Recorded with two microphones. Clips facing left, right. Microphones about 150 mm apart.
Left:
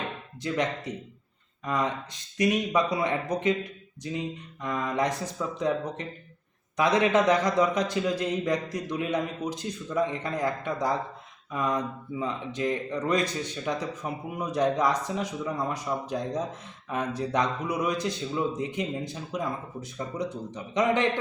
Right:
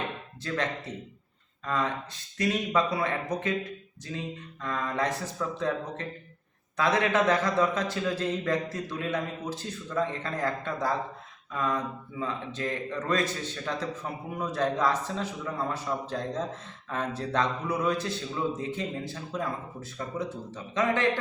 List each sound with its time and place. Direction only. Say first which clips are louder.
0.4 s speech: left 3 dB; 15° left (ahead or behind)